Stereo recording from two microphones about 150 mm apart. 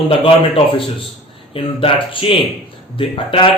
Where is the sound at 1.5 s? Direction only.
35° left (ahead or behind).